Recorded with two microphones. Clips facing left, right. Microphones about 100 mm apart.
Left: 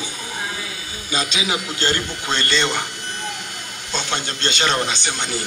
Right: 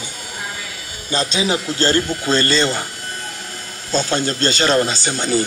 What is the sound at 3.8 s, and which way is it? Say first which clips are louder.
Speech: right 7 dB; 35° right (ahead or behind).